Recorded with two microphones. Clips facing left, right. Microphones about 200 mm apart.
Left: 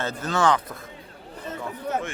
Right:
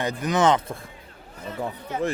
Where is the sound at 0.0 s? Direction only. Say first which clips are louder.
Right 2 dB; 15° right (ahead or behind).